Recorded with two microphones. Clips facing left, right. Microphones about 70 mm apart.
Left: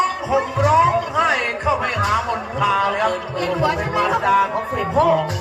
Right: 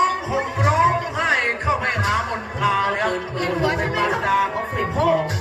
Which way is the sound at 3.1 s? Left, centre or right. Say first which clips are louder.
Left 1 dB; right.